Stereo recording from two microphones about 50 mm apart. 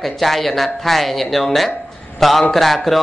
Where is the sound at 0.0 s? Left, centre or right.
Centre.